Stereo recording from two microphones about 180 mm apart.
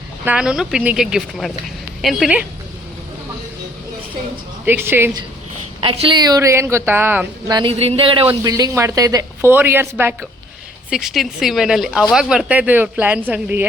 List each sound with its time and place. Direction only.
0.3 s speech: 5° right (ahead or behind)
4.6 s speech: 10° right (ahead or behind)
5.8 s speech: 30° right (ahead or behind); by 7.5 s 10° right (ahead or behind)
7.5 s speech: 30° right (ahead or behind); by 13.7 s 10° right (ahead or behind)